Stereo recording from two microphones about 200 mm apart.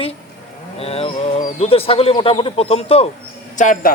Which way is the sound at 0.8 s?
30° left (ahead or behind).